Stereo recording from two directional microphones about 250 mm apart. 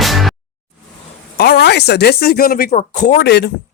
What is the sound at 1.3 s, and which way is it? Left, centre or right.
Speech, left.